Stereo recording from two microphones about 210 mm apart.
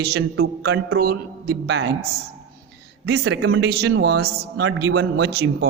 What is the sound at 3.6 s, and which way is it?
A man's voice, 50° right (ahead or behind).